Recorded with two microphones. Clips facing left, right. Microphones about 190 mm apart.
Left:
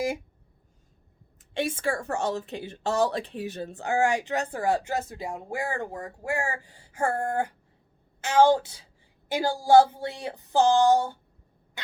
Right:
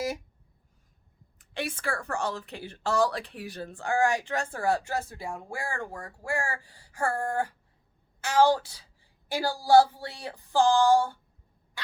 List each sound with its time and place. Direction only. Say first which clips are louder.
1.4 s a woman's voice: left 5 dB; 25° left (ahead or behind)